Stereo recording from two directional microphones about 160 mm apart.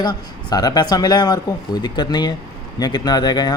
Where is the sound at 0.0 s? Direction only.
25° left (ahead or behind).